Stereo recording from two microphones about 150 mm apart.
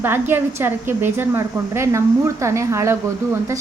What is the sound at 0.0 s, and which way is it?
A woman's voice, 15° right (ahead or behind).